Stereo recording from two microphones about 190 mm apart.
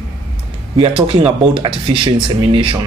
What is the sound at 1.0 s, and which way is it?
Speech, 30° right (ahead or behind).